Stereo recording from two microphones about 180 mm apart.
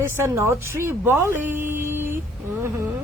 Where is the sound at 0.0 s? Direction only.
15° right (ahead or behind).